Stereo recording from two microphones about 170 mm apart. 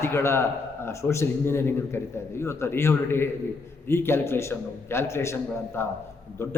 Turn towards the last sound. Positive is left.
turn(degrees=15)  # may be behind; listen again after turning